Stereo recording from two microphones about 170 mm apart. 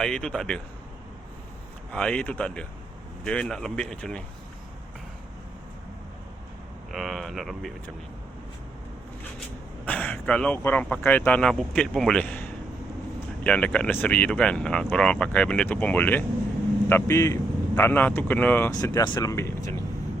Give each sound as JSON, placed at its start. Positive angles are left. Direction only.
{"t": 0.0, "sound": "speech", "side_deg": 5}
{"t": 1.9, "sound": "speech", "side_deg": 5}
{"t": 6.9, "sound": "speech", "side_deg": 0}
{"t": 9.8, "sound": "speech", "side_deg": 10}
{"t": 18.7, "sound": "speech", "side_deg": 20}